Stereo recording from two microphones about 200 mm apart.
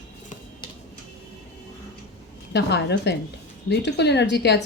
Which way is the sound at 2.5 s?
60° left (ahead or behind).